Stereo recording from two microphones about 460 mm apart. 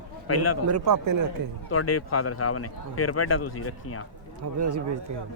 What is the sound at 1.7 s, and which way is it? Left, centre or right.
Speech, left.